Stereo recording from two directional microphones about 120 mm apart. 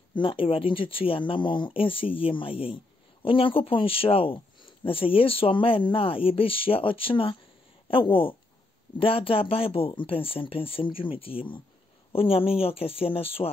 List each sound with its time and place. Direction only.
0.1 s speech: 45° left (ahead or behind)